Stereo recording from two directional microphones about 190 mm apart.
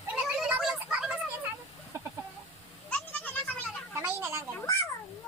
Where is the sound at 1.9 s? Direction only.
15° right (ahead or behind).